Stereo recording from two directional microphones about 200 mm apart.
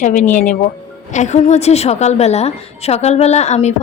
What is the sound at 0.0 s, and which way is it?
A woman's voice, 40° left (ahead or behind).